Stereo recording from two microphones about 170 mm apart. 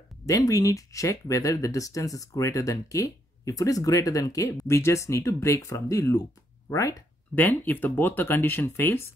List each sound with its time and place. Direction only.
0.3 s speech: 20° left (ahead or behind)